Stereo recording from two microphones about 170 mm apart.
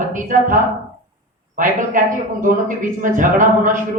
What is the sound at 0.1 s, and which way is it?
A man's voice, 50° right (ahead or behind).